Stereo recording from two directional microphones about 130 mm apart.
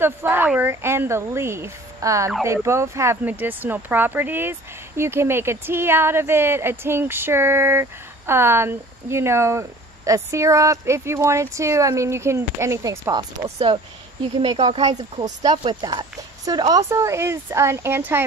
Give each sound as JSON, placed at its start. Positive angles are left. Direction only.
{"t": 0.0, "sound": "speech", "side_deg": -15}
{"t": 14.4, "sound": "speech", "side_deg": -40}